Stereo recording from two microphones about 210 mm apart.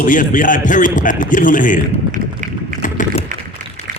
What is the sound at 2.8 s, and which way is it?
Typing, 40° left (ahead or behind).